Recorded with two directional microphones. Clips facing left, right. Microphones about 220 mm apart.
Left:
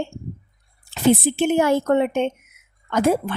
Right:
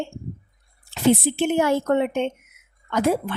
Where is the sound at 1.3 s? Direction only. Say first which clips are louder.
Left 2 dB; 45° left (ahead or behind).